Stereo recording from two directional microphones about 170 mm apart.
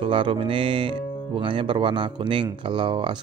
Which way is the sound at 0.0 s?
30° right (ahead or behind).